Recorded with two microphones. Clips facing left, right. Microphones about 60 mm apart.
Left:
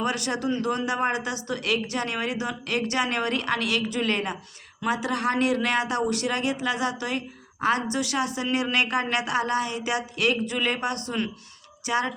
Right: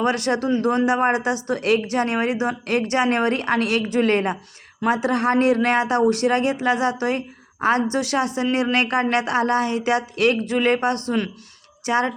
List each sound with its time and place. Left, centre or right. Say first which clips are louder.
0.0 s a woman's voice: right 6 dB; right